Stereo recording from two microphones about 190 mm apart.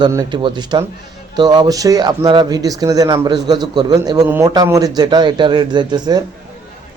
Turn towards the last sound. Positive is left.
turn(degrees=-20)  # may be behind; listen again after turning